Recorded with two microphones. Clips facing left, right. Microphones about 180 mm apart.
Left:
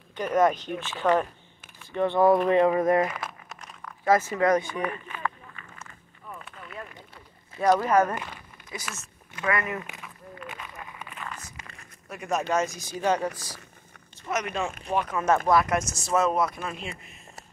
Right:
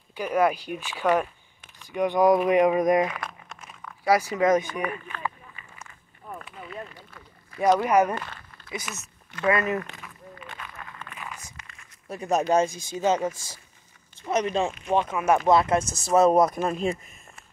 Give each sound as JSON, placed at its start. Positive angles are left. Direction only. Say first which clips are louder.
{"t": 0.1, "sound": "speech", "louder": "left 1 dB", "side_deg": -10}
{"t": 3.1, "sound": "crumpling", "louder": "even", "side_deg": 5}
{"t": 4.0, "sound": "speech", "louder": "right 1 dB", "side_deg": -15}
{"t": 7.6, "sound": "speech", "louder": "right 1 dB", "side_deg": -15}
{"t": 8.1, "sound": "a sound", "louder": "right 2 dB", "side_deg": 10}
{"t": 9.4, "sound": "speech", "louder": "right 5 dB", "side_deg": -25}
{"t": 9.8, "sound": "speech", "louder": "right 5 dB", "side_deg": 15}
{"t": 10.0, "sound": "a sound", "louder": "left 2 dB", "side_deg": 10}
{"t": 11.1, "sound": "a sound", "louder": "left 1 dB", "side_deg": -10}
{"t": 12.1, "sound": "speech", "louder": "right 4 dB", "side_deg": -35}
{"t": 14.3, "sound": "speech", "louder": "right 5 dB", "side_deg": -30}
{"t": 15.1, "sound": "speech", "louder": "left 1 dB", "side_deg": -10}
{"t": 15.4, "sound": "speech", "louder": "right 3 dB", "side_deg": -25}
{"t": 16.1, "sound": "speech", "louder": "right 6 dB", "side_deg": -35}